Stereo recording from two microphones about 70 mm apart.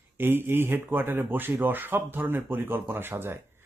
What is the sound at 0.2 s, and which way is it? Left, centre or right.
Speech, right.